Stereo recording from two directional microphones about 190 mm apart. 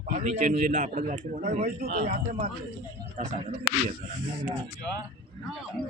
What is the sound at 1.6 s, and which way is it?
Speech, 50° right (ahead or behind).